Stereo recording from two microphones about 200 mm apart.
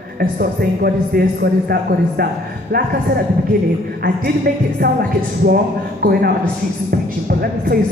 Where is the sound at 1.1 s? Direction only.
45° right (ahead or behind).